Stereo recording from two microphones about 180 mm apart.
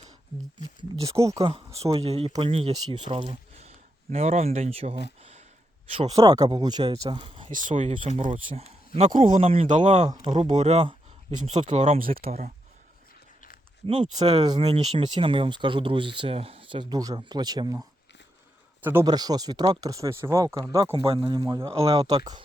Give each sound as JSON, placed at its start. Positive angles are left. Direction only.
{"t": 0.6, "sound": "speech", "side_deg": -20}
{"t": 1.4, "sound": "speech", "side_deg": -30}
{"t": 6.1, "sound": "speech", "side_deg": -20}
{"t": 7.5, "sound": "speech", "side_deg": -45}
{"t": 7.9, "sound": "speech", "side_deg": -30}
{"t": 9.0, "sound": "speech", "side_deg": -45}
{"t": 9.4, "sound": "speech", "side_deg": -30}
{"t": 12.1, "sound": "speech", "side_deg": -35}
{"t": 13.8, "sound": "speech", "side_deg": -30}